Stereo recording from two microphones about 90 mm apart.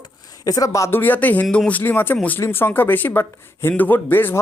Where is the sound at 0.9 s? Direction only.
20° left (ahead or behind).